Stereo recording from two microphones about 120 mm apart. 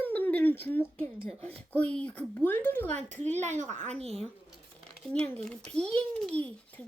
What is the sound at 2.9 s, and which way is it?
A woman's voice, 80° right.